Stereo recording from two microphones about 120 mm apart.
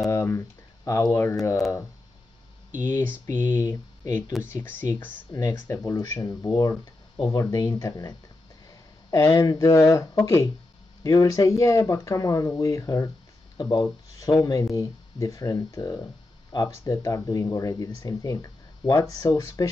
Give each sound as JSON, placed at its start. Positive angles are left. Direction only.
{"t": 0.1, "sound": "a sound", "side_deg": 25}
{"t": 1.0, "sound": "speech", "side_deg": 20}
{"t": 3.3, "sound": "speech", "side_deg": 35}